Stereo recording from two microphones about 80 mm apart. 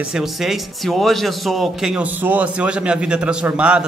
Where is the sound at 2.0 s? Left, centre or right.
Right.